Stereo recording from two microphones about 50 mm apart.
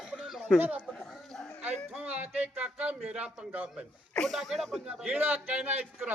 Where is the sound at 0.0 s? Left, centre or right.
Centre.